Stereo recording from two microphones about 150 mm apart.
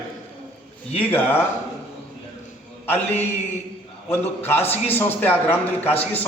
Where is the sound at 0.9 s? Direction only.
15° left (ahead or behind).